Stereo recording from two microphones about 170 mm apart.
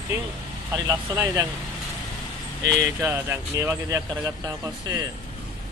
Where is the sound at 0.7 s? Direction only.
20° right (ahead or behind).